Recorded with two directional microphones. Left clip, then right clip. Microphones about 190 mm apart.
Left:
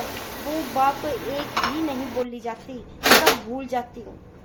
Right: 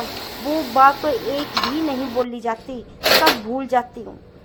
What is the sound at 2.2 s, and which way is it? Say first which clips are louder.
A woman's voice: right 7 dB; 20° right (ahead or behind).